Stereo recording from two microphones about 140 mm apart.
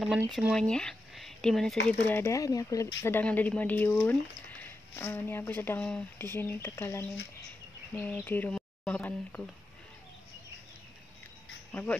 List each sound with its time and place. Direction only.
0.3 s speech: centre (ahead or behind)
2.0 s speech: 15° left (ahead or behind)
11.7 s speech: 10° left (ahead or behind)